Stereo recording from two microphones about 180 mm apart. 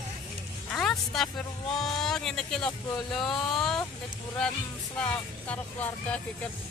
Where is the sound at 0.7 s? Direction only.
Centre (ahead or behind).